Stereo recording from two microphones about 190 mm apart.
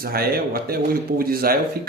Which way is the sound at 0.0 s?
55° right (ahead or behind).